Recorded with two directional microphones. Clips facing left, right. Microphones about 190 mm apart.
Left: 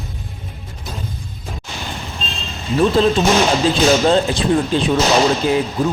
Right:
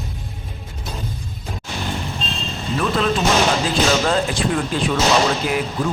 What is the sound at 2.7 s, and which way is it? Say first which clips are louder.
Speech: left 6 dB; 30° left (ahead or behind).